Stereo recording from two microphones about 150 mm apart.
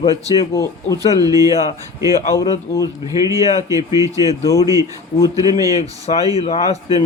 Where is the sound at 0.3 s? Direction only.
20° left (ahead or behind).